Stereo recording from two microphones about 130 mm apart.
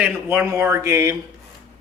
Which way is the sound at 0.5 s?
20° right (ahead or behind).